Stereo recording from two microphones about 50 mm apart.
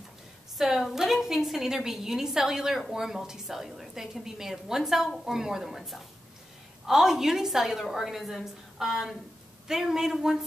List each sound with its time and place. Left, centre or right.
0.6 s a woman's voice: centre